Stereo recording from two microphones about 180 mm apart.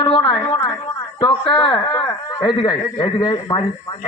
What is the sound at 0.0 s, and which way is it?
A woman's voice, 25° left (ahead or behind).